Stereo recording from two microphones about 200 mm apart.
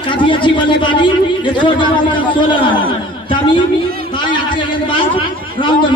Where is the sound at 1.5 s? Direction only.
25° left (ahead or behind).